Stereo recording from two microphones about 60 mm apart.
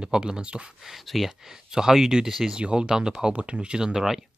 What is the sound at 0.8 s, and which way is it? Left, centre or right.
Speech, centre.